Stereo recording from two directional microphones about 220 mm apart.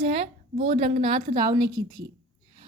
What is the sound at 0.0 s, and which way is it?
A woman's voice, 30° right (ahead or behind).